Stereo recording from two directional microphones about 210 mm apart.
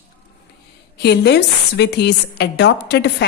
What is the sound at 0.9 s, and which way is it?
A woman's voice, 50° left (ahead or behind).